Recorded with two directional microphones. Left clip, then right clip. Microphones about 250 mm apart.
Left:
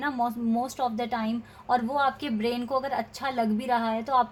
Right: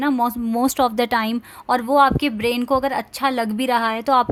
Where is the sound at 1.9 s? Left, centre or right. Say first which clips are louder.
Right 11 dB; right.